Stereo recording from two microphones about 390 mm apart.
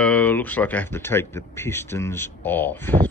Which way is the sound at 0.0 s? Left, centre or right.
Centre.